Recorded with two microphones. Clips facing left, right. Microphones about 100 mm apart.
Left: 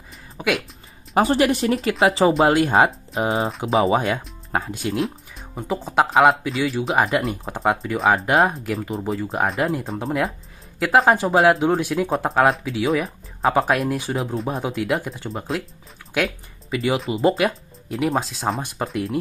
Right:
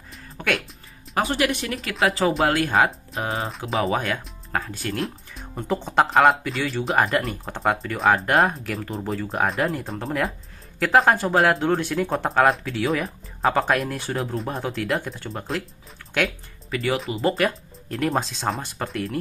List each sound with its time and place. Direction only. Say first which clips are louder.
0.4 s a woman's voice: left 3 dB; 5° left (ahead or behind)
1.2 s speech: left 5 dB; 35° left (ahead or behind)
3.4 s speech: left 6 dB; centre (ahead or behind)
4.5 s speech: left 3 dB; 20° left (ahead or behind)
4.9 s speech: left 4 dB; 5° left (ahead or behind)
16.7 s speech: left 3 dB; 15° left (ahead or behind)
18.6 s speech: left 3 dB; 15° left (ahead or behind)